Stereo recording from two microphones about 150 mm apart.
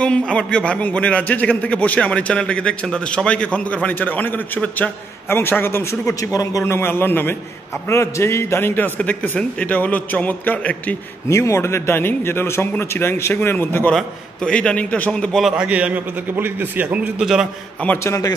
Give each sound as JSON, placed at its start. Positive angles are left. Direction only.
{"t": 0.0, "sound": "a man's voice", "side_deg": 5}
{"t": 17.8, "sound": "a man's voice", "side_deg": 20}